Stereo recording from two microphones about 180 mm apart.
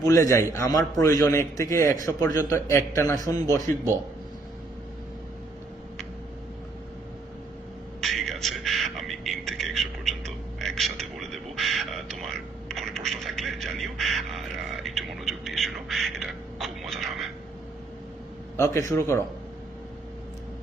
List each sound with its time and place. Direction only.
0.0 s a man's voice: 15° left (ahead or behind)
8.0 s music: centre (ahead or behind)
18.5 s a man's voice: 15° left (ahead or behind)